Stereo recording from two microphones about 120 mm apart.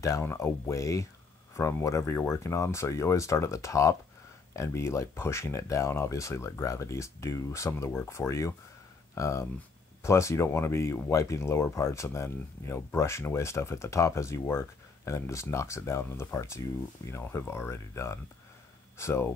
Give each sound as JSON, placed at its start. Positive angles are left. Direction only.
{"t": 0.0, "sound": "speech", "side_deg": 20}